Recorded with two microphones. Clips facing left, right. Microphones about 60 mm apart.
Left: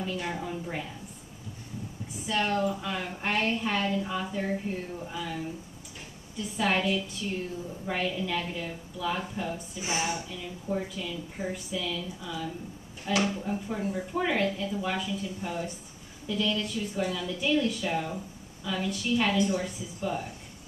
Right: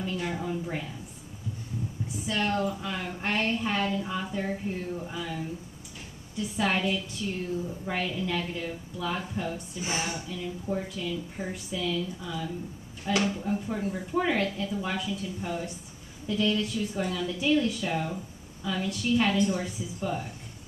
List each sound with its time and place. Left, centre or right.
0.0 s a woman's voice: centre
2.2 s a woman's voice: centre
6.5 s a woman's voice: centre
9.8 s speech: centre
10.3 s a woman's voice: centre